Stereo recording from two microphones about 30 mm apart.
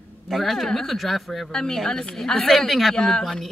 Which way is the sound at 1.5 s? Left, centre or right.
Centre.